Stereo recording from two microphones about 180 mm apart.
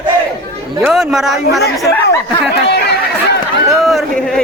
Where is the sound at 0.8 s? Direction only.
Centre (ahead or behind).